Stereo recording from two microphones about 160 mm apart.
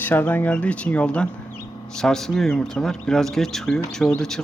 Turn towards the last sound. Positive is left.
turn(degrees=5)  # may be behind; listen again after turning